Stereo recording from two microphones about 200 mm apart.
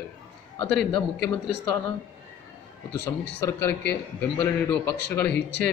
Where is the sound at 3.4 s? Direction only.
15° left (ahead or behind).